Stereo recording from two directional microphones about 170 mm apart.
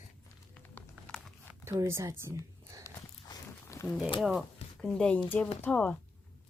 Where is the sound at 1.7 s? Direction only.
20° right (ahead or behind).